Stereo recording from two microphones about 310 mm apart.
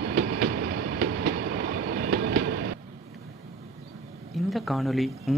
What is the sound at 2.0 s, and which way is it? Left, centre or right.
Train, right.